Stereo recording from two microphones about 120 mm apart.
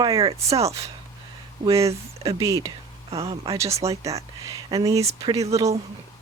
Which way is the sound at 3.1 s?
55° right (ahead or behind).